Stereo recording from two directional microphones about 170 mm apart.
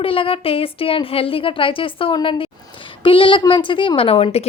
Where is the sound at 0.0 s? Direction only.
30° left (ahead or behind).